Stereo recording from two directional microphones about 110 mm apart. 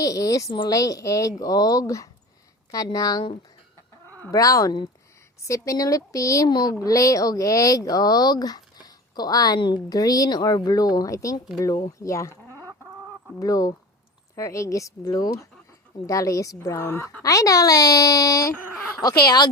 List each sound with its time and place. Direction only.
0.0 s speech: 30° left (ahead or behind)
4.3 s speech: 30° left (ahead or behind)
13.4 s speech: 30° left (ahead or behind)